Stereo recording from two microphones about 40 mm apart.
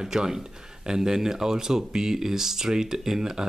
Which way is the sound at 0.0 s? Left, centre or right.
Centre.